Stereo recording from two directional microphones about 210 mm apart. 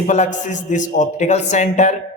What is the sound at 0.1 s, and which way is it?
A man's voice, 35° left (ahead or behind).